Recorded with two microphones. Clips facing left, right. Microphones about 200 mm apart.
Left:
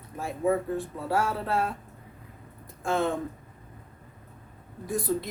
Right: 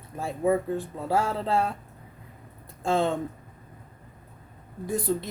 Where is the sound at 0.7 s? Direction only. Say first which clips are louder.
Right 1 dB; 25° right (ahead or behind).